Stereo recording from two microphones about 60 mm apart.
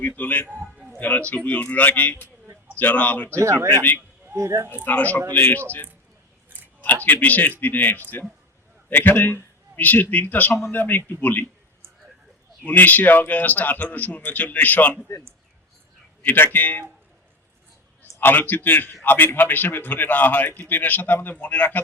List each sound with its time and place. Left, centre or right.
0.2 s a man's voice: left
3.2 s speech: right
3.7 s a man's voice: left
4.4 s speech: right
4.9 s a man's voice: left
12.6 s a man's voice: left
16.2 s a man's voice: left
18.0 s a man's voice: left